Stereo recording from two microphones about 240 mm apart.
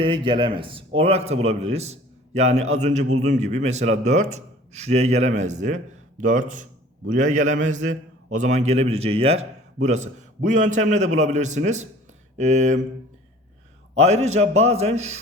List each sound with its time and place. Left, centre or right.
0.0 s a man's voice: right
13.9 s a man's voice: right